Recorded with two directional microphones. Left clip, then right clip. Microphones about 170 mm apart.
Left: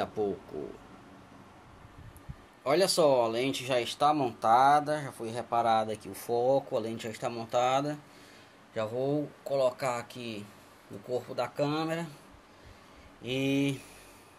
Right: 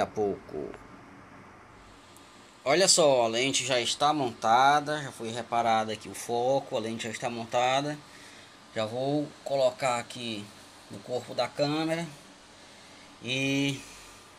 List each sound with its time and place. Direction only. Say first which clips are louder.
0.0 s speech: right 3 dB; 5° right (ahead or behind)
2.6 s speech: right 3 dB; 5° left (ahead or behind)
13.2 s speech: right 1 dB; 10° left (ahead or behind)